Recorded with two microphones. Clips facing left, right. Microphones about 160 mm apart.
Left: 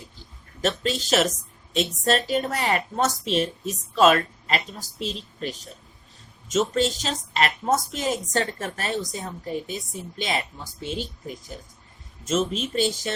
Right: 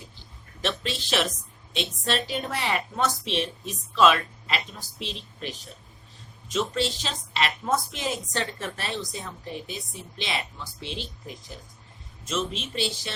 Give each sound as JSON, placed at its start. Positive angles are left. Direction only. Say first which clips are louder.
{"t": 0.6, "sound": "a woman's voice", "louder": "left 5 dB", "side_deg": 45}
{"t": 6.5, "sound": "a woman's voice", "louder": "left 4 dB", "side_deg": 45}
{"t": 12.2, "sound": "a woman's voice", "louder": "left 6 dB", "side_deg": 45}